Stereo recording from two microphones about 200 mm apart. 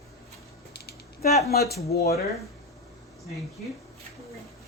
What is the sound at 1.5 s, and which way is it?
Speech, 50° left (ahead or behind).